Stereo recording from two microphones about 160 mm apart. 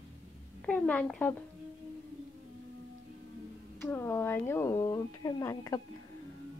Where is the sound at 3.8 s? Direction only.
15° left (ahead or behind).